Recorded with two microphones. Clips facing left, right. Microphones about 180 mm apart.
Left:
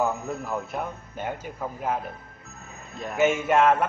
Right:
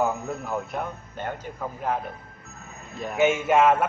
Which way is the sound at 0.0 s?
Centre (ahead or behind).